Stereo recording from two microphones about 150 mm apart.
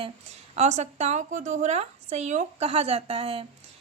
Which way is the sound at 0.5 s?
50° right (ahead or behind).